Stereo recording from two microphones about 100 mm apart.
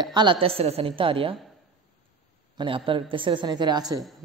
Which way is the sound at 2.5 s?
60° right (ahead or behind).